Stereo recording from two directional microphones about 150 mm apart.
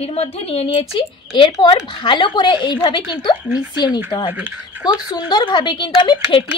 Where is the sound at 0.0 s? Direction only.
40° left (ahead or behind).